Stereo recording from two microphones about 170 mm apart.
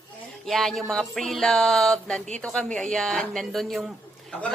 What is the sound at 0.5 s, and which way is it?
Music, centre (ahead or behind).